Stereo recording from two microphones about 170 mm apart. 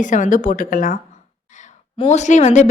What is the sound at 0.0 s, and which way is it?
Speech, 50° left (ahead or behind).